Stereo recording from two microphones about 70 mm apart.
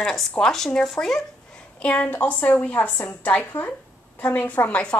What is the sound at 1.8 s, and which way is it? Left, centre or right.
A woman's voice, centre.